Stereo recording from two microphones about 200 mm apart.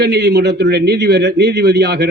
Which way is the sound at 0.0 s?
55° right (ahead or behind).